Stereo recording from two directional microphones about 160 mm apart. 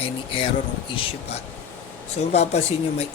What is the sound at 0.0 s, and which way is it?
Speech, 35° left (ahead or behind).